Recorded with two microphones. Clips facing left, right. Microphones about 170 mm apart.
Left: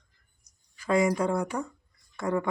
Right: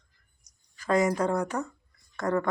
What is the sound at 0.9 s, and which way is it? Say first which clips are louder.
Speech: even; 45° right (ahead or behind).